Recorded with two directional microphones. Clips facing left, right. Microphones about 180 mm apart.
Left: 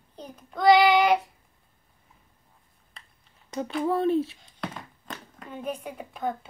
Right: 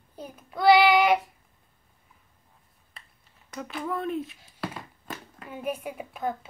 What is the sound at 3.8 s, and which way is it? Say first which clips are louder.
Speech: left 7 dB; 30° left (ahead or behind).